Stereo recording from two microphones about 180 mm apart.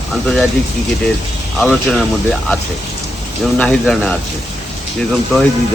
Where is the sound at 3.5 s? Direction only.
5° left (ahead or behind).